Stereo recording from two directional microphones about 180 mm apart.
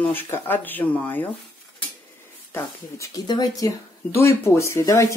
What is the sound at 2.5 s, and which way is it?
Speech, 20° left (ahead or behind).